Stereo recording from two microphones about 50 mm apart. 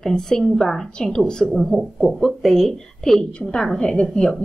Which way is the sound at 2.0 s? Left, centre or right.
Centre.